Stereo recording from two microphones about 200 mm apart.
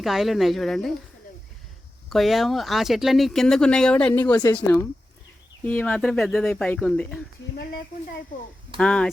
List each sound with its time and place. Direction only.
0.0 s speech: centre (ahead or behind)
2.0 s speech: centre (ahead or behind)
7.5 s speech: 50° left (ahead or behind)
8.8 s speech: 5° left (ahead or behind)